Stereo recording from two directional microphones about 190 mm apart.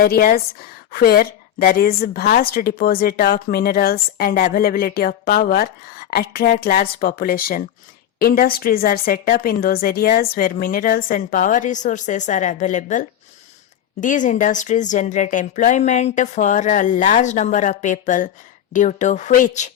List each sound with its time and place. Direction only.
0.0 s a woman's voice: 50° left (ahead or behind)